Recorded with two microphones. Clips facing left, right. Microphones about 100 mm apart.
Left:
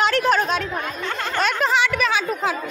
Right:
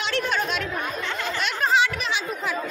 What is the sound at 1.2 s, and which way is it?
Speech, 50° left (ahead or behind).